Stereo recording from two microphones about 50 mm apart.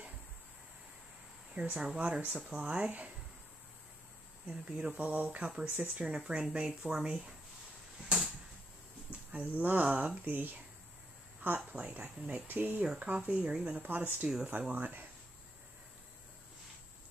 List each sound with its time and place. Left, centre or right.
1.6 s speech: right
4.5 s speech: centre
4.9 s speech: right; by 7.3 s centre
9.3 s speech: right
9.8 s speech: right
10.2 s speech: right
13.8 s speech: right
14.2 s speech: centre
14.7 s speech: right